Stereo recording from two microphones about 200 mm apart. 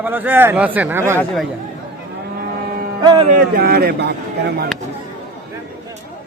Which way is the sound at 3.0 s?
25° right (ahead or behind).